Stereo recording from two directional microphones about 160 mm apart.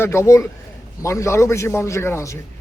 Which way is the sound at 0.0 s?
15° left (ahead or behind).